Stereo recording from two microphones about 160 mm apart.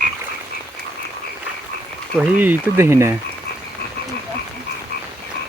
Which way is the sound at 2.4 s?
10° right (ahead or behind).